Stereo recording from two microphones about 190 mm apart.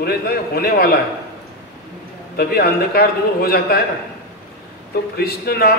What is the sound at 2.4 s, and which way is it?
Speech, 55° left (ahead or behind).